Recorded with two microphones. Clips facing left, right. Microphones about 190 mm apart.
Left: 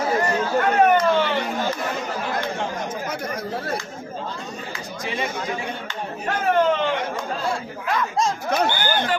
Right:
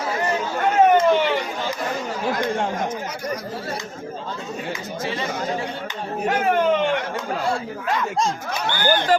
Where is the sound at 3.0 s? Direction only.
55° left (ahead or behind).